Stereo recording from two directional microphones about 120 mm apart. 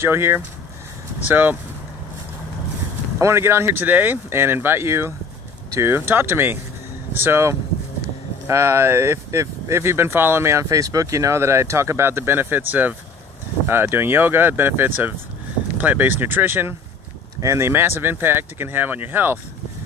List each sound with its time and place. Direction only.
0.0 s speech: 20° right (ahead or behind)
3.2 s speech: 20° right (ahead or behind)